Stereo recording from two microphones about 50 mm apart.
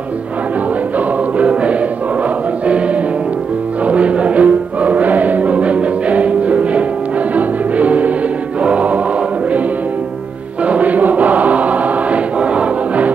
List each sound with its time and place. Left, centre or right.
0.9 s choir: right
2.6 s music: right
8.6 s choir: right
10.6 s choir: right